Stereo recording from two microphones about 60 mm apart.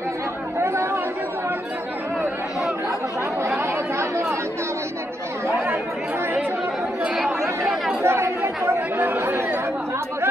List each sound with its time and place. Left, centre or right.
0.6 s chatter: right
3.5 s chatter: right
7.0 s chatter: centre
8.0 s chatter: right